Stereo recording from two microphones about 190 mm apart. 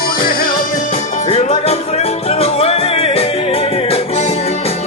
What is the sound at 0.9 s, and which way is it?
Music, 35° left (ahead or behind).